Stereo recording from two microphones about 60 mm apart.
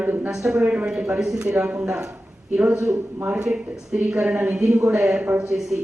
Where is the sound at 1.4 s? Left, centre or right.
Right.